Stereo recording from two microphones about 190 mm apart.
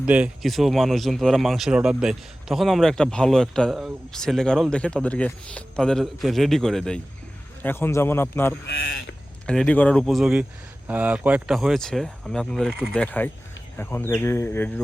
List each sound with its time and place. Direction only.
0.0 s a man's voice: 5° right (ahead or behind); by 8.5 s 10° left (ahead or behind)
8.6 s speech: 85° left
9.5 s a man's voice: 5° left (ahead or behind)